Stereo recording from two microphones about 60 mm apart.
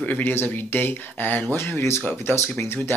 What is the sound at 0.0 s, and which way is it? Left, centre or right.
Speech, left.